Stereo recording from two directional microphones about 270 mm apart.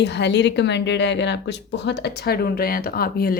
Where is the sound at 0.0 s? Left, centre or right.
Left.